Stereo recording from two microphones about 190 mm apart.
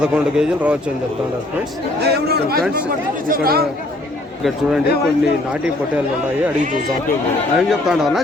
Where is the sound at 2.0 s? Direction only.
60° right (ahead or behind).